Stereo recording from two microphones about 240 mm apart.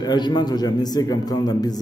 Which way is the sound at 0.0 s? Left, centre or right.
Centre.